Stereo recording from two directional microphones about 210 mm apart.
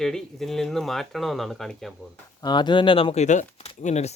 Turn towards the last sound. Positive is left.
turn(degrees=35)  # may be behind; listen again after turning